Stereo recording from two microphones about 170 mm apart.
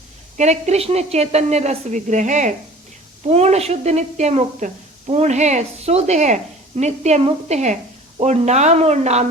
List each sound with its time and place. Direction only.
0.3 s a woman's voice: 45° right (ahead or behind)